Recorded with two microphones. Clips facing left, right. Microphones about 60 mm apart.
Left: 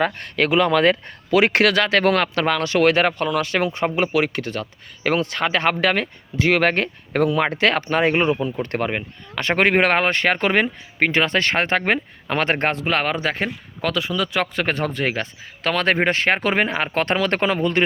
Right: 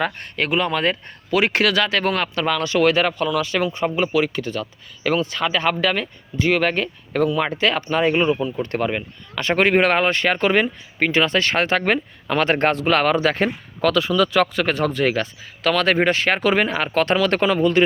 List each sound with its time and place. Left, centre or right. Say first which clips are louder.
0.2 s speech: left 3 dB; left
8.8 s speech: right 1 dB; left
9.4 s speech: right 1 dB; left
12.6 s speech: right 4 dB; centre
14.5 s speech: right 2 dB; left